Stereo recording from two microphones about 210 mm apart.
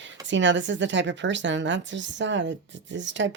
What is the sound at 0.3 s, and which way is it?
A woman's voice, 60° right (ahead or behind).